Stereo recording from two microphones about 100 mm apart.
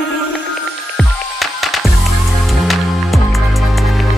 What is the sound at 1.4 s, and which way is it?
Music, centre (ahead or behind).